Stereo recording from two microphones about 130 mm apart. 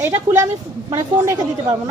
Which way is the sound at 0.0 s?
20° right (ahead or behind).